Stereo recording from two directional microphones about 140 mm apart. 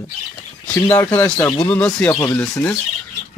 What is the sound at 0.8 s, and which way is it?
Speech, 15° left (ahead or behind).